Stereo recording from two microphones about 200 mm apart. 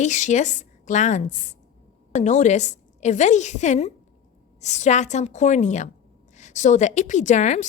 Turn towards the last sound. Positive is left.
turn(degrees=35)  # may be behind; listen again after turning